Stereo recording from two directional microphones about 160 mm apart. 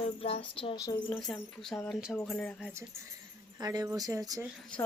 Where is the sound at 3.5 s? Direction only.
25° right (ahead or behind).